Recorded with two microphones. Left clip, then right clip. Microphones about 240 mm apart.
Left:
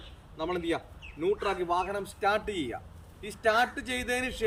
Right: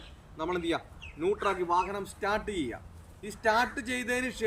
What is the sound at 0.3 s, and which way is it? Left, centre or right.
A man's voice, centre.